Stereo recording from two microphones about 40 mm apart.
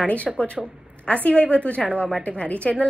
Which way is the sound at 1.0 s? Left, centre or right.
Left.